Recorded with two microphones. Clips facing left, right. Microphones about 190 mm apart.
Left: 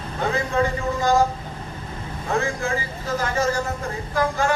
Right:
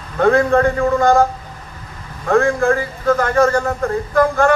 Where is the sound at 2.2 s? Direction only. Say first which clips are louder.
Right 10 dB; 55° right (ahead or behind).